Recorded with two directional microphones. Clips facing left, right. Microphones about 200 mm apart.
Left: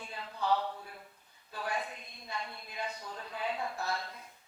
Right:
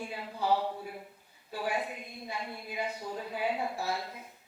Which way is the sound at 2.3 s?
10° right (ahead or behind).